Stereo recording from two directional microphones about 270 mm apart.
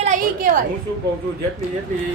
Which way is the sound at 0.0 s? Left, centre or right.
Right.